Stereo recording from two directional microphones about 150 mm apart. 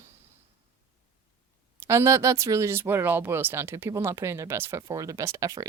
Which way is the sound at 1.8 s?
20° right (ahead or behind).